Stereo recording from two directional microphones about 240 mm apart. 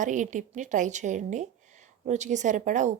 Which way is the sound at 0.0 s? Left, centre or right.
Right.